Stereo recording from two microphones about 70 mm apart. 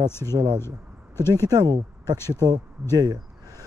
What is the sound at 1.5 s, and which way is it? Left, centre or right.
Speech, right.